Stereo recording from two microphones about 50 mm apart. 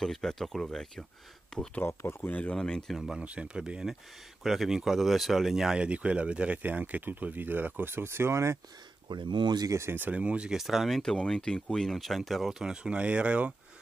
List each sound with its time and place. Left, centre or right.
0.0 s speech: centre
2.2 s speech: left
2.5 s speech: centre
2.9 s speech: centre
3.2 s speech: right
4.4 s speech: centre
5.8 s speech: right
9.8 s speech: right
10.1 s speech: right
10.5 s speech: centre
11.0 s speech: centre
12.5 s speech: centre